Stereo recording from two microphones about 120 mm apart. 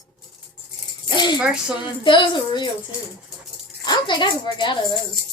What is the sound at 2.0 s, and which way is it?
Music, 40° left (ahead or behind).